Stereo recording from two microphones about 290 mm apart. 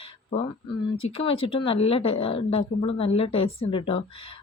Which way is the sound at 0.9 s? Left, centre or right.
Centre.